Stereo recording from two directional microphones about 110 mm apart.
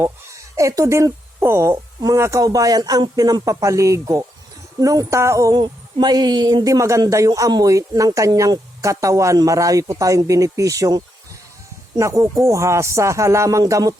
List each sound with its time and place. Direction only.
0.0 s speech: 30° right (ahead or behind)
5.5 s speech: 40° right (ahead or behind)